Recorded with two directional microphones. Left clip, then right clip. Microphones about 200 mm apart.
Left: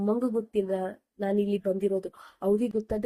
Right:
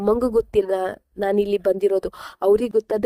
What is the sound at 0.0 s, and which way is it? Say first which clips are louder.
A woman's voice: right 9 dB; 45° right (ahead or behind).